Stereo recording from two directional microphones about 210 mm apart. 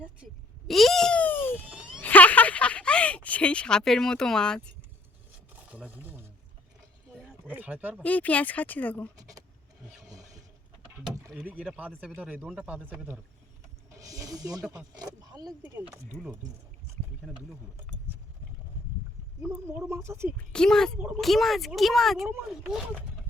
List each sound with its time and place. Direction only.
0.7 s speech: centre (ahead or behind)
1.5 s wail: 5° right (ahead or behind)
2.0 s a sound: 10° left (ahead or behind)
5.7 s speech: 5° right (ahead or behind)
7.4 s speech: 10° right (ahead or behind)
8.0 s speech: 5° left (ahead or behind)
9.1 s speech: 15° right (ahead or behind)
10.0 s mechanisms: 15° right (ahead or behind)
11.3 s speech: 5° right (ahead or behind)
19.4 s speech: 10° right (ahead or behind)
20.5 s speech: 5° left (ahead or behind)